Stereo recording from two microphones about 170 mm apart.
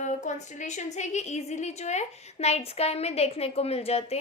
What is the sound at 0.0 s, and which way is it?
A woman's voice, 45° left (ahead or behind).